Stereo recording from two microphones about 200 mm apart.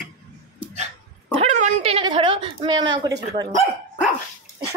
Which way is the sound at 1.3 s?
35° right (ahead or behind).